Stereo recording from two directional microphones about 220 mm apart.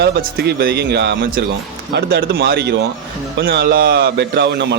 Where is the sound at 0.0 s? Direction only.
45° right (ahead or behind).